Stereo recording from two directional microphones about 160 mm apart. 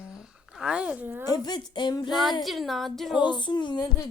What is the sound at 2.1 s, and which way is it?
A woman's voice, centre (ahead or behind).